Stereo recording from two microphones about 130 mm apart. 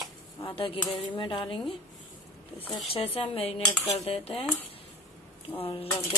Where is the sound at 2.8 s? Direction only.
45° left (ahead or behind).